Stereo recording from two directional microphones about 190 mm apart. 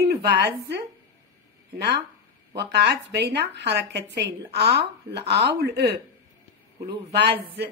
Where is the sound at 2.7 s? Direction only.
60° right (ahead or behind).